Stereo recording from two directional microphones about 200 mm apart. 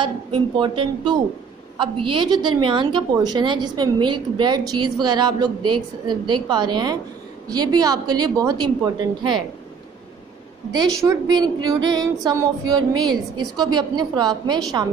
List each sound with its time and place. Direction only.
0.0 s a woman's voice: 25° right (ahead or behind)
10.7 s a woman's voice: 20° right (ahead or behind)